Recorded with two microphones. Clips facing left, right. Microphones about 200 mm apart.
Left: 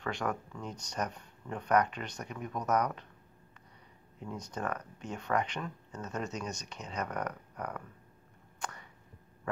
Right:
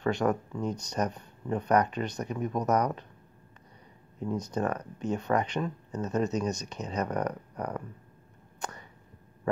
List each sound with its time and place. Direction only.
0.0 s speech: 40° right (ahead or behind)
4.3 s speech: 35° right (ahead or behind)
8.5 s a sound: 40° right (ahead or behind)